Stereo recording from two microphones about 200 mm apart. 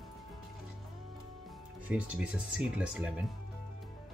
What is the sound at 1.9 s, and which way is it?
Speech, 5° right (ahead or behind).